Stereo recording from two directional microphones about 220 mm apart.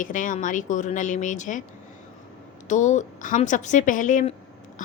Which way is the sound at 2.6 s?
35° left (ahead or behind).